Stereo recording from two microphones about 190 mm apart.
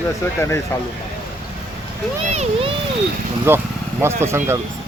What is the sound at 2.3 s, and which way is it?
Speech, 35° right (ahead or behind).